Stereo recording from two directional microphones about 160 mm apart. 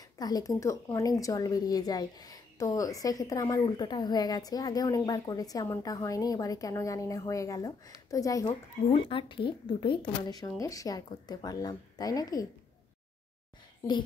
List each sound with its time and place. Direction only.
0.2 s a woman's voice: 25° left (ahead or behind)
8.5 s a woman's voice: 35° left (ahead or behind)